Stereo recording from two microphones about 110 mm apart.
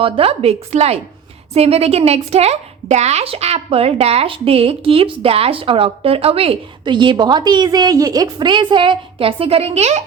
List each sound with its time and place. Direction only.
0.0 s a woman's voice: 60° right (ahead or behind)
6.8 s a woman's voice: 45° right (ahead or behind); by 10.0 s 75° right (ahead or behind)